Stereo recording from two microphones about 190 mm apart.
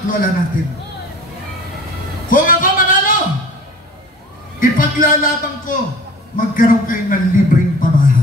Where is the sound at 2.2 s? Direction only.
45° left (ahead or behind).